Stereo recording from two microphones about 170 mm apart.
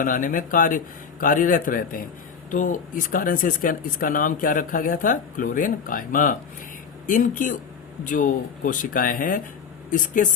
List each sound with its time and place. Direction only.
0.0 s speech: 50° left (ahead or behind)